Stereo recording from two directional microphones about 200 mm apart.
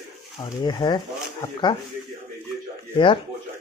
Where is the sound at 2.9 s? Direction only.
25° left (ahead or behind).